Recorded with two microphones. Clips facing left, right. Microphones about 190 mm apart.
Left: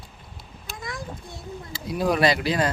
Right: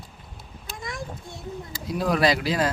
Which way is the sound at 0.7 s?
25° right (ahead or behind).